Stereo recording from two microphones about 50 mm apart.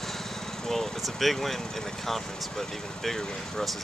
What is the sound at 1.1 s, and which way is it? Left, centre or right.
Speech, centre.